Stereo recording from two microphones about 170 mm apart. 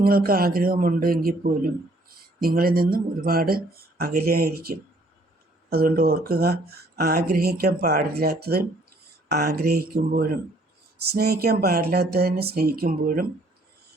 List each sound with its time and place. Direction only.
0.0 s a man's voice: 60° right (ahead or behind)